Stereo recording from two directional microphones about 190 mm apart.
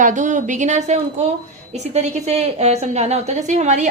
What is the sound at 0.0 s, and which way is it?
A woman's voice, 40° right (ahead or behind).